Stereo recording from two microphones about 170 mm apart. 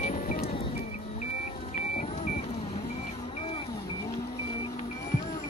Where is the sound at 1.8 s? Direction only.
45° left (ahead or behind).